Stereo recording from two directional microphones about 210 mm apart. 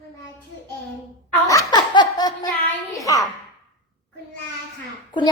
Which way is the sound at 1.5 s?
20° left (ahead or behind).